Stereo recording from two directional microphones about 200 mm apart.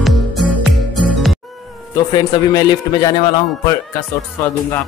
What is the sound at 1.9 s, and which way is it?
A man's voice, 20° left (ahead or behind).